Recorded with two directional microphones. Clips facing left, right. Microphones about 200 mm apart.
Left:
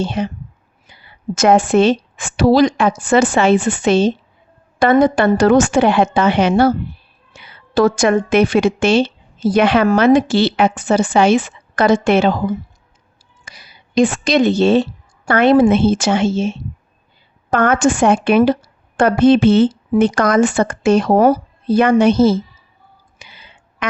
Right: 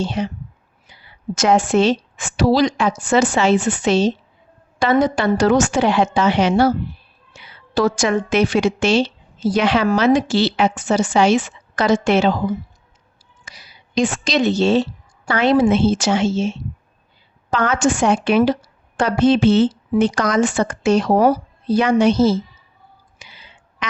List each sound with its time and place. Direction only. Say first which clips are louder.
0.0 s a woman's voice: left 2 dB; 55° left (ahead or behind); by 3.8 s 75° left (ahead or behind)
3.8 s a woman's voice: left 3 dB; 55° left (ahead or behind)
23.1 s whispering: left 3 dB; 55° left (ahead or behind)